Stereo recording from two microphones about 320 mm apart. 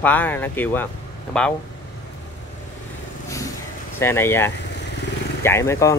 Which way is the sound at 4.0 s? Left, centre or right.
Centre.